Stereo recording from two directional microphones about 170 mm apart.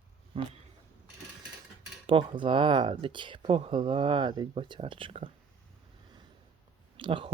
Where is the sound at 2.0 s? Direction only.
30° right (ahead or behind).